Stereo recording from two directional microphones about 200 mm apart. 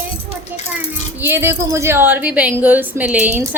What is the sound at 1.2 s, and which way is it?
A woman's voice, 10° right (ahead or behind).